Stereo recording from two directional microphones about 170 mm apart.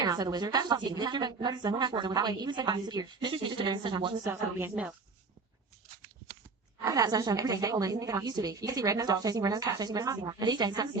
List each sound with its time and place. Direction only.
0.0 s a woman's voice: 20° right (ahead or behind)
4.2 s a woman's voice: 15° right (ahead or behind)
6.8 s a woman's voice: 20° right (ahead or behind)